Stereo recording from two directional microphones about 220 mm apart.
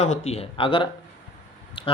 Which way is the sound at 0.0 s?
30° left (ahead or behind).